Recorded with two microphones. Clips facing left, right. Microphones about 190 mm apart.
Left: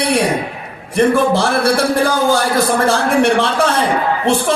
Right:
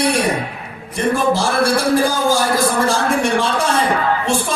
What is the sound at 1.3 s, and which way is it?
A man's voice, 60° left (ahead or behind).